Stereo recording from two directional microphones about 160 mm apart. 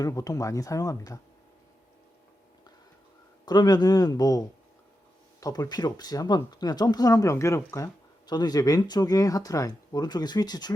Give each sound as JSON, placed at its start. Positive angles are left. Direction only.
{"t": 0.0, "sound": "speech", "side_deg": 20}
{"t": 3.4, "sound": "speech", "side_deg": 25}